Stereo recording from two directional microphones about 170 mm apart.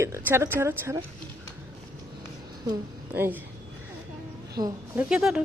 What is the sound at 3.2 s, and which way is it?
Speech, 10° right (ahead or behind).